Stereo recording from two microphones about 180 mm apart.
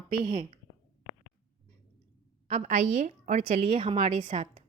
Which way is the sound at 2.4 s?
40° right (ahead or behind).